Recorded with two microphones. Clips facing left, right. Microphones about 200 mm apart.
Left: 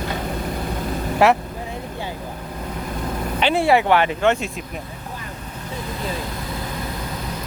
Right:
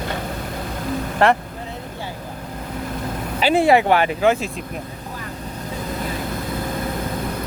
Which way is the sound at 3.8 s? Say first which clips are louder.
Even; 40° right (ahead or behind).